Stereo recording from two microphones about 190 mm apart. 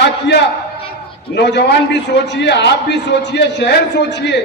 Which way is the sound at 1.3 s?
65° left (ahead or behind).